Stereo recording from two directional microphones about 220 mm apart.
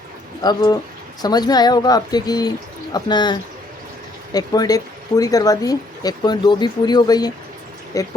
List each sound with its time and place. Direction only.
0.4 s speech: 20° left (ahead or behind)
4.4 s speech: 15° left (ahead or behind)